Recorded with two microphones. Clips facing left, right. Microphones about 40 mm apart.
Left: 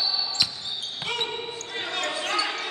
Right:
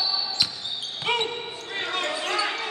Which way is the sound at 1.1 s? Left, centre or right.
Right.